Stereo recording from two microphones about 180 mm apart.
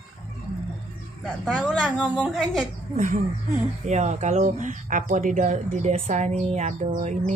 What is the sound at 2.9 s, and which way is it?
Speech, 45° right (ahead or behind).